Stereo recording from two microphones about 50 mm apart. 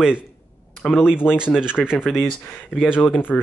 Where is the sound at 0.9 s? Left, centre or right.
Centre.